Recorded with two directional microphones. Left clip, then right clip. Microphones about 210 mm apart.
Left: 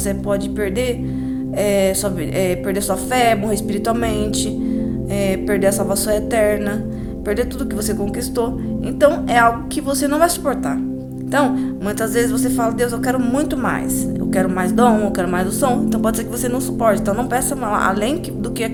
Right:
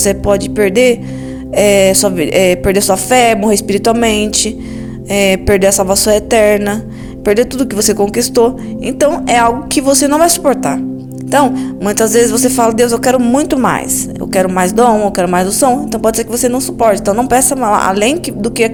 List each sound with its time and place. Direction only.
0.0 s speech: 35° right (ahead or behind)